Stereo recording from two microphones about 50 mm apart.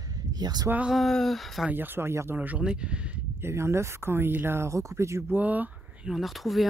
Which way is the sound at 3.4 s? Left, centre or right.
Right.